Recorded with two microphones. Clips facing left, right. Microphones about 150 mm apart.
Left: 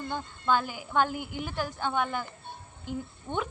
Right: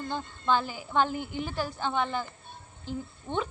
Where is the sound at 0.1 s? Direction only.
10° left (ahead or behind).